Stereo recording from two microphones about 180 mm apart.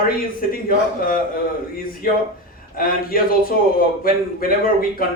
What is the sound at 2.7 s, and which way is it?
Speech, 50° left (ahead or behind).